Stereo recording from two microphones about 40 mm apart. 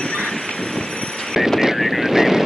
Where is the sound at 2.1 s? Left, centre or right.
Centre.